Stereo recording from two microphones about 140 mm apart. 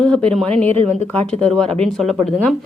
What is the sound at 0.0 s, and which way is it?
Speech, 5° left (ahead or behind).